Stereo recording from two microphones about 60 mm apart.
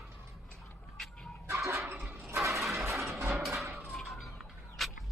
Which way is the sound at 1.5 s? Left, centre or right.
Right.